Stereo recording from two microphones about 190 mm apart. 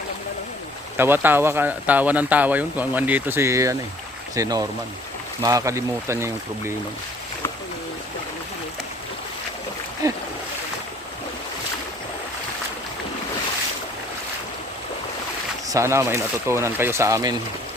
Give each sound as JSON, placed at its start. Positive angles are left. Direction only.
{"t": 0.9, "sound": "speech", "side_deg": -10}
{"t": 10.0, "sound": "speech", "side_deg": -20}
{"t": 15.7, "sound": "speech", "side_deg": -15}